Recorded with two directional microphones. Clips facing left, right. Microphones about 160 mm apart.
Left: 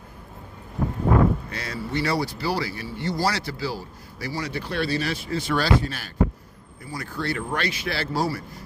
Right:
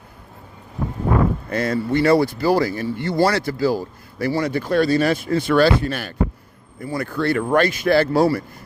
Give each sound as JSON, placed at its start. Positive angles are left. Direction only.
{"t": 1.5, "sound": "speech", "side_deg": -50}